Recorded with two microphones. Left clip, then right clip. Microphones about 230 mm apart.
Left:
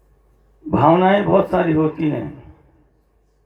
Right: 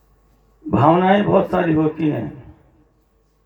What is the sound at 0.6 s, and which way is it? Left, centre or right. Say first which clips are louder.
Speech: left 1 dB; right.